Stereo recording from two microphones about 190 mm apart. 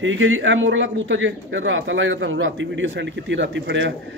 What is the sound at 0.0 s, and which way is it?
A man's voice, 90° right.